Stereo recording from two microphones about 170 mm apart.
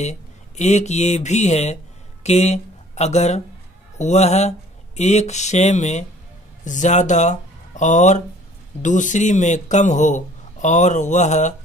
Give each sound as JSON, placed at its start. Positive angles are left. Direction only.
{"t": 0.0, "sound": "a man's voice", "side_deg": 40}